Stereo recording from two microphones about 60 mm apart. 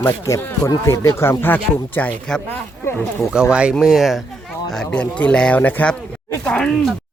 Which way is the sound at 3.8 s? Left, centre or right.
Centre.